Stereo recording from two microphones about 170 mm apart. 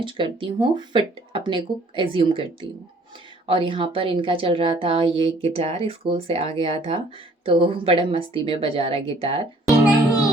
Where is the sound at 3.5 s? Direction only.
30° right (ahead or behind).